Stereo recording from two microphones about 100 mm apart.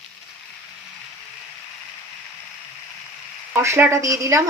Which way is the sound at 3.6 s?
30° right (ahead or behind).